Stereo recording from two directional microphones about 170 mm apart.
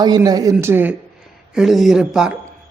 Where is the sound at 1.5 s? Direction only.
Centre (ahead or behind).